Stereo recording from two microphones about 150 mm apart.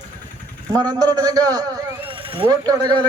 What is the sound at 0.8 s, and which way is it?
A man's voice, 25° right (ahead or behind).